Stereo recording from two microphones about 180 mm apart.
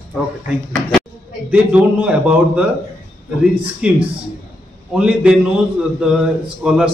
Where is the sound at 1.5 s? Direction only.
5° right (ahead or behind).